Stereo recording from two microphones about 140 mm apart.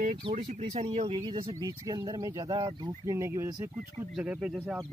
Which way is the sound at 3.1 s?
20° right (ahead or behind).